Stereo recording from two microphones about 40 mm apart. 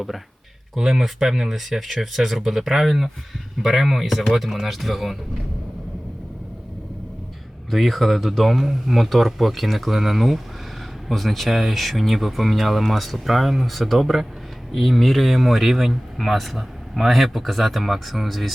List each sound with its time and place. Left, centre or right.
0.8 s speech: centre
7.7 s speech: centre